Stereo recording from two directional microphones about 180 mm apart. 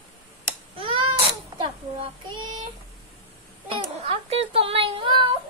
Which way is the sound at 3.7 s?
35° right (ahead or behind).